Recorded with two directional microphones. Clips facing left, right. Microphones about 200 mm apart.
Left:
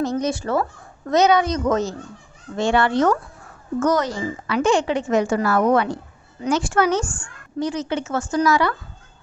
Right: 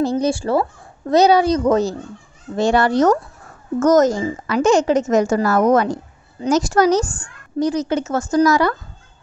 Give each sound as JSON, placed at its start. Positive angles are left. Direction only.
{"t": 0.0, "sound": "a woman's voice", "side_deg": -30}